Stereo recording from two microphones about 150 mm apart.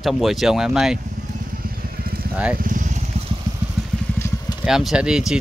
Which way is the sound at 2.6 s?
60° right (ahead or behind).